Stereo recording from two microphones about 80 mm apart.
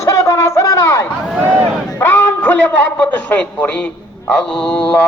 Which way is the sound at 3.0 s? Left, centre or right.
Centre.